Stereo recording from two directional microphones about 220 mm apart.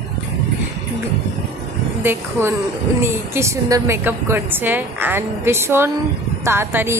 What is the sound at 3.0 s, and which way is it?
A woman's voice, 10° right (ahead or behind).